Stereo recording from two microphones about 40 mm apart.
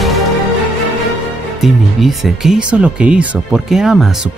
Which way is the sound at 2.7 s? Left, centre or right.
Right.